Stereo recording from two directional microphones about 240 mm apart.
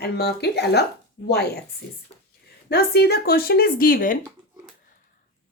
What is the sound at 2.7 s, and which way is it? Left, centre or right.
Speech, left.